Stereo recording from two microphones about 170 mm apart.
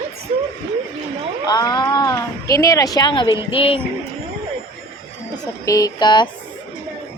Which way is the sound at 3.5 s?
30° left (ahead or behind).